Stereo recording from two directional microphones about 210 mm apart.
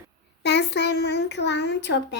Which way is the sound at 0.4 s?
55° left (ahead or behind).